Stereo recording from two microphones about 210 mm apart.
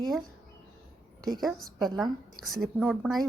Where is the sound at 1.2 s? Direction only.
20° right (ahead or behind).